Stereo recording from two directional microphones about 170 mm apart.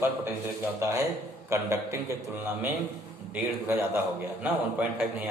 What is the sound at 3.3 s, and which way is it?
A man's voice, 15° right (ahead or behind).